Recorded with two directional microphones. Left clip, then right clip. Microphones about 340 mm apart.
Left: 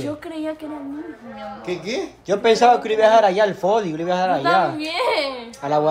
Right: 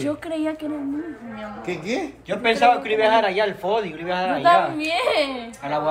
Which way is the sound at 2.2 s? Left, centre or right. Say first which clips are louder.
Left 3 dB; centre.